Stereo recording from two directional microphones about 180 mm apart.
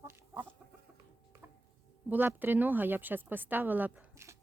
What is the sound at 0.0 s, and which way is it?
Chicken, 15° right (ahead or behind).